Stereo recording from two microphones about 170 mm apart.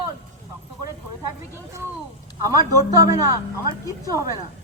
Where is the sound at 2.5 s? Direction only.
20° right (ahead or behind).